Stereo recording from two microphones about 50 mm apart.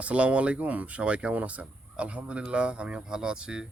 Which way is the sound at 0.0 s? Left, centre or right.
Right.